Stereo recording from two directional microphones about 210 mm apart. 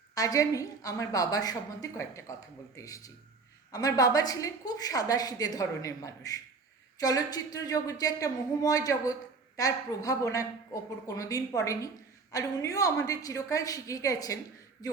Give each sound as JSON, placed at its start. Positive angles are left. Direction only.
{"t": 0.1, "sound": "a woman's voice", "side_deg": 15}